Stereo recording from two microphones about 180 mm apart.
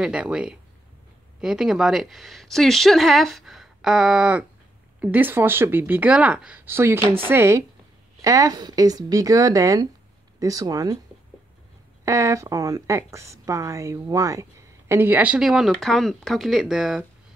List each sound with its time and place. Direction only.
0.0 s a woman's voice: 5° right (ahead or behind); by 11.0 s 20° right (ahead or behind)
12.0 s a woman's voice: 15° right (ahead or behind)